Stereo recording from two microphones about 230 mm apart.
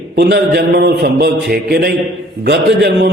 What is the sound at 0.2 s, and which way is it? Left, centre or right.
A man's voice, right.